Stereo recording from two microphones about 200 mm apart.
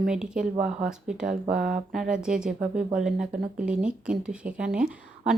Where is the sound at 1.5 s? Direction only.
45° right (ahead or behind).